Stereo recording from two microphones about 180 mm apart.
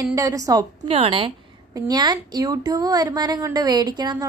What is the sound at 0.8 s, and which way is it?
A woman's voice, 30° right (ahead or behind).